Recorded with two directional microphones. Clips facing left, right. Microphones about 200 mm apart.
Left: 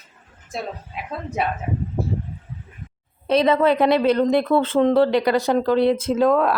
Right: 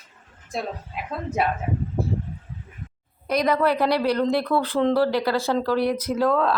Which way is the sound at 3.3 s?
25° left (ahead or behind).